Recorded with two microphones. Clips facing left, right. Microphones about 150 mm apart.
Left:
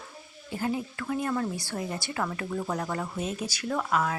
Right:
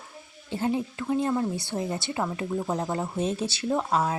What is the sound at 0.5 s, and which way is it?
Speech, 25° right (ahead or behind).